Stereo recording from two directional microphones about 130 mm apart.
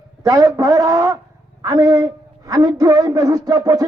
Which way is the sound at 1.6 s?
30° right (ahead or behind).